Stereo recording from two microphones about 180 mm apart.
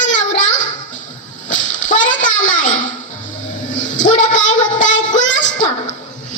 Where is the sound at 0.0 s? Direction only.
45° left (ahead or behind).